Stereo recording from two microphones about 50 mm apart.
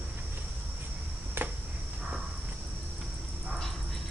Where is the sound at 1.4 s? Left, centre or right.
Right.